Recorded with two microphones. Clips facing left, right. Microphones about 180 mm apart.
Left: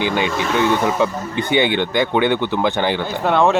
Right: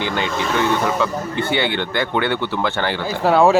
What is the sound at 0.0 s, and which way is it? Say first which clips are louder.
Speech: left 2 dB; 15° left (ahead or behind).